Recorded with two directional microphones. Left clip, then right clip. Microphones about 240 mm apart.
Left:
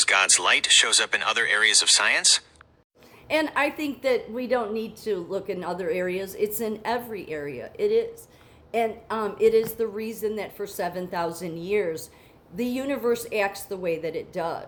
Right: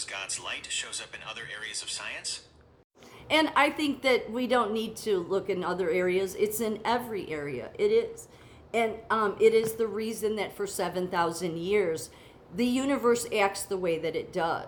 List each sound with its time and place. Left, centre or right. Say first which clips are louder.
0.0 s speech: left 16 dB; left
3.2 s a woman's voice: even; centre